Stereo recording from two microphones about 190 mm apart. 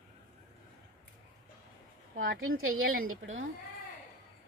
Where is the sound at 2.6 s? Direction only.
90° right.